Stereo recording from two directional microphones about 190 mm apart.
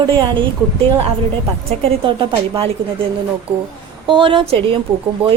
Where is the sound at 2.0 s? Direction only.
25° right (ahead or behind).